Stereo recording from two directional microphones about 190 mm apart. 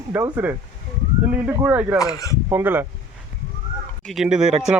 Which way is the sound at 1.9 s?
20° left (ahead or behind).